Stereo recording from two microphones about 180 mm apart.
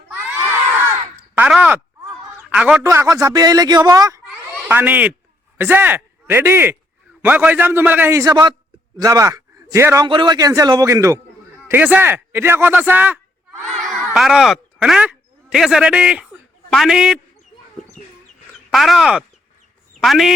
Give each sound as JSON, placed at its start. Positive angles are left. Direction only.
{"t": 1.1, "sound": "a sound", "side_deg": -10}
{"t": 2.5, "sound": "a man's voice", "side_deg": -5}
{"t": 2.8, "sound": "speech", "side_deg": -15}
{"t": 13.6, "sound": "a child's voice", "side_deg": 5}
{"t": 18.0, "sound": "chicken", "side_deg": 0}
{"t": 18.7, "sound": "a man's voice", "side_deg": 0}